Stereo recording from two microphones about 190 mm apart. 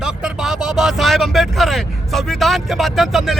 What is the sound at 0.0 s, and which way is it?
Speech, 5° right (ahead or behind).